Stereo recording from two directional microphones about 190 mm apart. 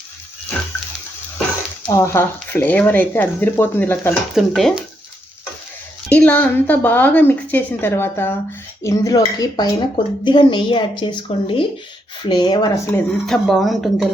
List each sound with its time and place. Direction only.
1.9 s speech: 15° left (ahead or behind)
4.4 s speech: centre (ahead or behind)
6.1 s a woman's voice: 5° left (ahead or behind)
13.2 s speech: centre (ahead or behind)